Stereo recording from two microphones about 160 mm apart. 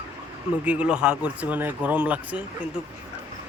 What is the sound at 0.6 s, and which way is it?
Speech, 10° right (ahead or behind).